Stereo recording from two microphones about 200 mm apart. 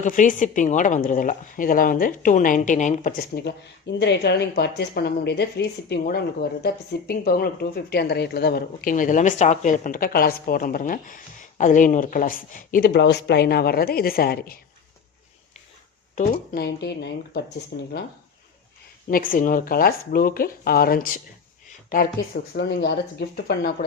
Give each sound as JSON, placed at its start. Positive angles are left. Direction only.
{"t": 0.0, "sound": "a woman's voice", "side_deg": 40}
{"t": 16.1, "sound": "speech", "side_deg": 50}
{"t": 19.0, "sound": "speech", "side_deg": 45}